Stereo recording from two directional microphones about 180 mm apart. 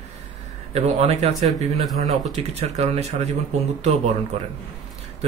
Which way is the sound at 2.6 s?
35° right (ahead or behind).